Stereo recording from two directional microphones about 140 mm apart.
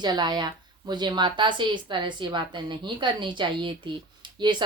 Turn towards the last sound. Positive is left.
turn(degrees=-35)  # may be behind; listen again after turning